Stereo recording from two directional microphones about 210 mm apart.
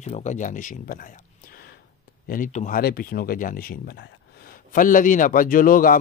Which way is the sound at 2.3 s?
35° left (ahead or behind).